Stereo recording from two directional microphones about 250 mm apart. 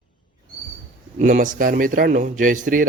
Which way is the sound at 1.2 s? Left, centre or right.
Right.